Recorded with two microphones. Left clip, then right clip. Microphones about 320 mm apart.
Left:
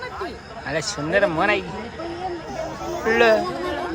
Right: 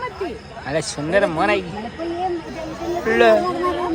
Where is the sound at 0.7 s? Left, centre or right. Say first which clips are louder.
Right 2 dB; centre.